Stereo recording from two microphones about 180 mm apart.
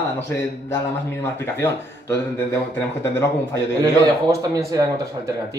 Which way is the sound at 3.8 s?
20° right (ahead or behind).